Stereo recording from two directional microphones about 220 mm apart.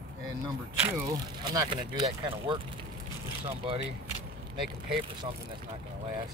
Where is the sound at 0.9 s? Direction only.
15° right (ahead or behind).